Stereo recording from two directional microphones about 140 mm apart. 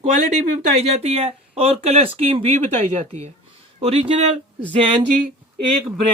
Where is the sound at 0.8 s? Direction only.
50° right (ahead or behind).